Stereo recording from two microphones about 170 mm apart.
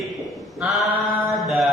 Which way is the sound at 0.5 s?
5° right (ahead or behind).